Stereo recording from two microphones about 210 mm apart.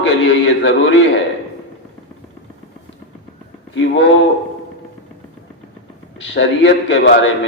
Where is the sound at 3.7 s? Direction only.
60° left (ahead or behind).